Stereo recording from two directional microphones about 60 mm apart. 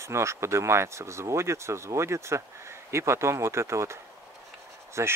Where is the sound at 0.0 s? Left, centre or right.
Right.